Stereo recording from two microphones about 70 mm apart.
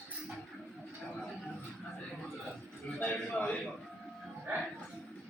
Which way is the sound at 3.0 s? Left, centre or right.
Left.